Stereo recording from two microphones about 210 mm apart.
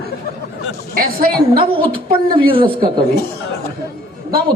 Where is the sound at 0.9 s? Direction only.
45° right (ahead or behind).